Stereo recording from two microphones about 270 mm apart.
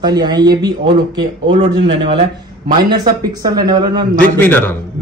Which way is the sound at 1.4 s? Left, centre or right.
Centre.